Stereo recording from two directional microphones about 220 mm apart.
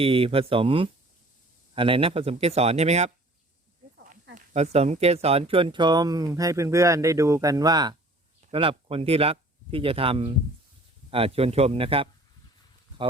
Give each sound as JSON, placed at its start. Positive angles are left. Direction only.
{"t": 0.0, "sound": "speech", "side_deg": -25}
{"t": 4.4, "sound": "speech", "side_deg": -30}